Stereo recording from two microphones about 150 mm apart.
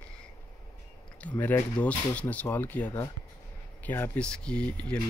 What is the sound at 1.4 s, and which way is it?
Speech, 10° left (ahead or behind).